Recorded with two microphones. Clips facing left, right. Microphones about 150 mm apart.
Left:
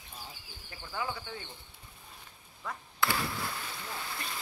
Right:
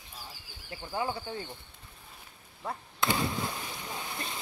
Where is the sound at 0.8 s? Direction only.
30° right (ahead or behind).